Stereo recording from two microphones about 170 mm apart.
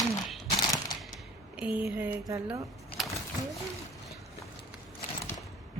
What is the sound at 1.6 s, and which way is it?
Speech, 10° right (ahead or behind).